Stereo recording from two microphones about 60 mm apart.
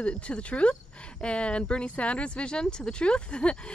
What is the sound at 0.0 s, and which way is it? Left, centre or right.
Speech, centre.